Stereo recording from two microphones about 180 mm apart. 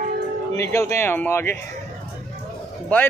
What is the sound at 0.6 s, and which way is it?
Speech, 15° left (ahead or behind).